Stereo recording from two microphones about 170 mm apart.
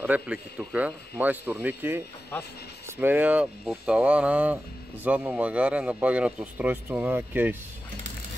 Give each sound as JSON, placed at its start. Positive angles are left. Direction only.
{"t": 0.0, "sound": "speech", "side_deg": -10}